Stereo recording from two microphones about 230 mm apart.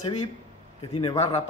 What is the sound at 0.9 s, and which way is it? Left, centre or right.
Speech, left.